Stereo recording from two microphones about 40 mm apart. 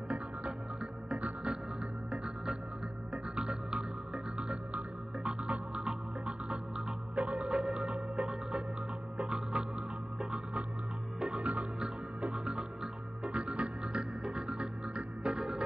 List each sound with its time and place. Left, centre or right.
0.1 s music: right
1.5 s music: centre
3.7 s music: centre
7.2 s music: right
7.4 s music: centre
11.1 s music: centre
12.4 s music: centre
13.2 s music: right